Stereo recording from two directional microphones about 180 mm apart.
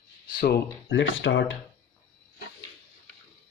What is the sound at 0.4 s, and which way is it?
Speech, 70° left (ahead or behind).